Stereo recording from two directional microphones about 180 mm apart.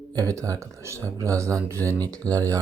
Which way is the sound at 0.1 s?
20° right (ahead or behind).